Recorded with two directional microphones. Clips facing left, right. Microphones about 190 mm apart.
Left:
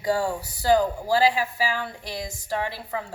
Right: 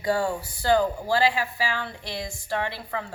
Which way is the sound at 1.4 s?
10° left (ahead or behind).